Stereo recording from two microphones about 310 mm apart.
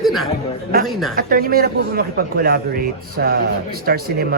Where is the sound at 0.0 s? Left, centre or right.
Centre.